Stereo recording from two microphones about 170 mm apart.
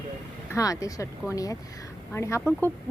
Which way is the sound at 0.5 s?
20° left (ahead or behind).